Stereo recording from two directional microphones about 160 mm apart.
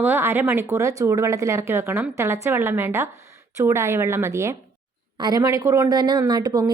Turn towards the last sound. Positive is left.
turn(degrees=-25)  # may be behind; listen again after turning